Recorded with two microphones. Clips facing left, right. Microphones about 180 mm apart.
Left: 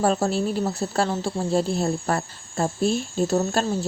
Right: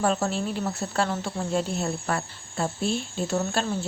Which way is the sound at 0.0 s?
35° left (ahead or behind).